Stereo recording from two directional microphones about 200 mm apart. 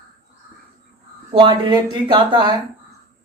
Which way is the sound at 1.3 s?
25° right (ahead or behind).